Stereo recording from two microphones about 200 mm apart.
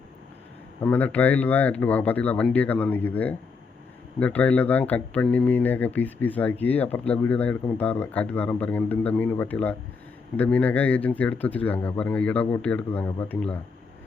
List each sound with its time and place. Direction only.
0.9 s speech: 10° left (ahead or behind)